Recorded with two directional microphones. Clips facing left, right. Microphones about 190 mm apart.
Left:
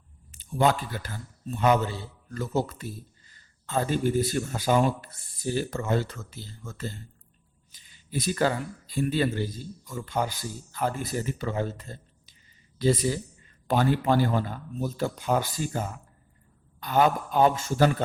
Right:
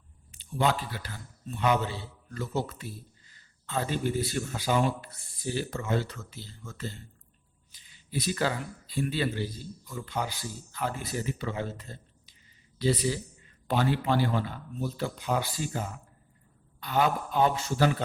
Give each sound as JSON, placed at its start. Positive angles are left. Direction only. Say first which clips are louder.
{"t": 0.3, "sound": "a man's voice", "louder": "left 4 dB", "side_deg": 45}
{"t": 16.8, "sound": "speech", "louder": "left 4 dB", "side_deg": 45}